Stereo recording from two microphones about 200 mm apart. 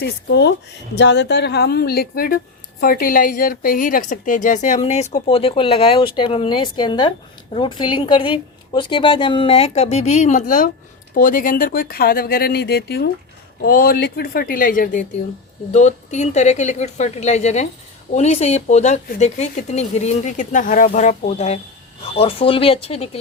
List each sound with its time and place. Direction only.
0.0 s a woman's voice: 60° left (ahead or behind); by 23.0 s 30° left (ahead or behind)